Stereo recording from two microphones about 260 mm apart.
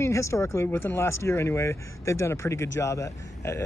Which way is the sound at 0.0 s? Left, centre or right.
Centre.